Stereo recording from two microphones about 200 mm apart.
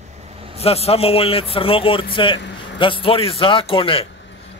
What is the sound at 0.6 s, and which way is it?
A man's voice, 30° left (ahead or behind).